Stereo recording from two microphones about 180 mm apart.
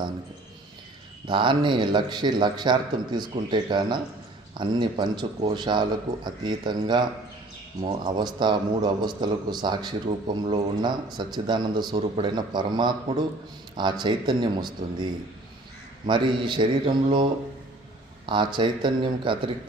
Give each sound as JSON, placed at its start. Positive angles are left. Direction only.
{"t": 1.2, "sound": "a man's voice", "side_deg": -25}
{"t": 10.0, "sound": "a man's voice", "side_deg": -35}
{"t": 16.1, "sound": "a man's voice", "side_deg": -25}